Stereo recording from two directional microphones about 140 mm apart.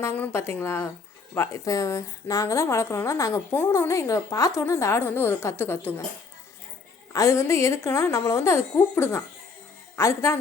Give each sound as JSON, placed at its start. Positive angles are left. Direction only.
{"t": 0.0, "sound": "a woman's voice", "side_deg": 15}
{"t": 7.1, "sound": "a woman's voice", "side_deg": 20}